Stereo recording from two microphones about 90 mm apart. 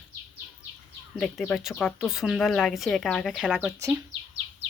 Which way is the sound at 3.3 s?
10° right (ahead or behind).